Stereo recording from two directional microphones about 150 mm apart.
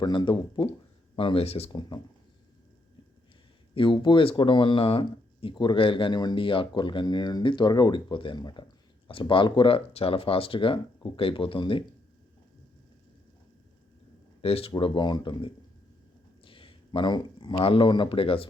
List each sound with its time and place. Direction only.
0.0 s speech: 30° left (ahead or behind)
3.8 s speech: 35° left (ahead or behind)
14.4 s speech: 40° left (ahead or behind)